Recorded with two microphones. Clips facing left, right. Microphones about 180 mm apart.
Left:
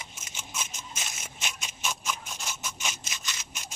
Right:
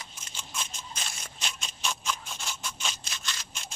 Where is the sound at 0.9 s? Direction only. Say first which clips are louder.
Left 1 dB; 20° left (ahead or behind); by 3.2 s 5° left (ahead or behind).